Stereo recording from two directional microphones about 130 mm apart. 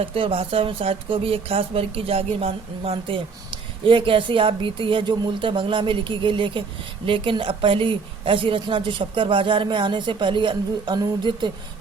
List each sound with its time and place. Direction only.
0.0 s a woman's voice: 45° right (ahead or behind)